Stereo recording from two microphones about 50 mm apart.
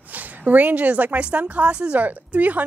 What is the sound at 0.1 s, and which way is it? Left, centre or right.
A woman's voice, right.